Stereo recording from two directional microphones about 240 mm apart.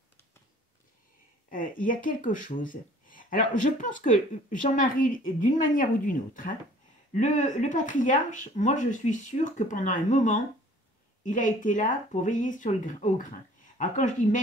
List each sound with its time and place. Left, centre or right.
1.5 s speech: left